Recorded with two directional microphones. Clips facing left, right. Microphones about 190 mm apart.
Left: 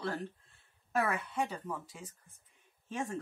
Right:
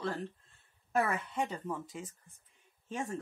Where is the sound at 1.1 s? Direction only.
5° left (ahead or behind).